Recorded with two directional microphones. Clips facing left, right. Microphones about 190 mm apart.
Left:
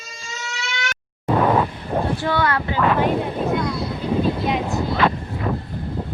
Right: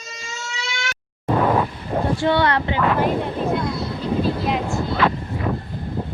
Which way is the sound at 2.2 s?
25° right (ahead or behind).